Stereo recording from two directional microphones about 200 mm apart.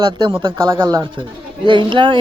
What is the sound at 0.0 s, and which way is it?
Speech, 25° right (ahead or behind).